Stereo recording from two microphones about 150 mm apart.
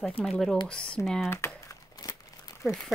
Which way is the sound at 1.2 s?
15° left (ahead or behind).